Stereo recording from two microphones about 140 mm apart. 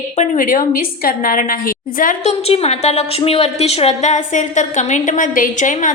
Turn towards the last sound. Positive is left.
turn(degrees=65)  # may be behind; listen again after turning